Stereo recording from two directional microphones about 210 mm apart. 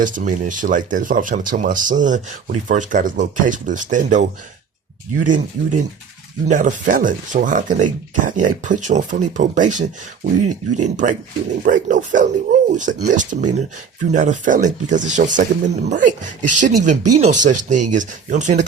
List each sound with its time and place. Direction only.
0.0 s speech: 40° right (ahead or behind)